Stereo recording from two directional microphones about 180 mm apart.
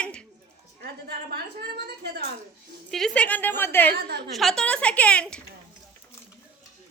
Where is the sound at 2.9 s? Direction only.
Centre (ahead or behind).